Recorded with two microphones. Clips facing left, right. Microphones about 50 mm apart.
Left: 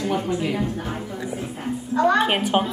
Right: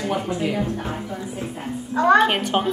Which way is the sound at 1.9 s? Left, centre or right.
Right.